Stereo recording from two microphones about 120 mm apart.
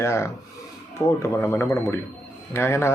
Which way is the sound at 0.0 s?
25° left (ahead or behind).